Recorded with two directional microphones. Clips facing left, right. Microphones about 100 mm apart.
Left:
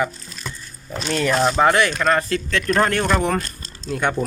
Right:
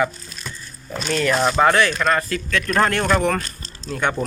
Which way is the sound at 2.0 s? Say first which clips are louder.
Left 1 dB; 30° left (ahead or behind).